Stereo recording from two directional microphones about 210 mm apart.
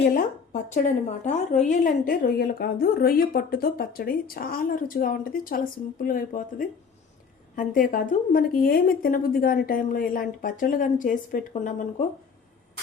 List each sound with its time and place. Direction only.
0.0 s a woman's voice: 40° left (ahead or behind)